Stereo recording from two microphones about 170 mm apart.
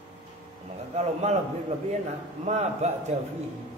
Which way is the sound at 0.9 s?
40° right (ahead or behind).